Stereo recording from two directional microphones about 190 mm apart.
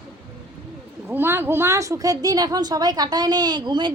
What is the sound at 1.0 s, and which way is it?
A woman's voice, 10° right (ahead or behind).